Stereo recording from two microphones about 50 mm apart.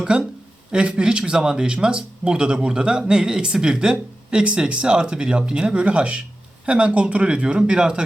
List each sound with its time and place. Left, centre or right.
0.0 s speech: centre